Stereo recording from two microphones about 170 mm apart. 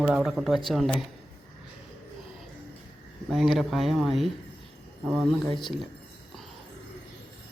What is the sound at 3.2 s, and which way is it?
Speech, centre (ahead or behind).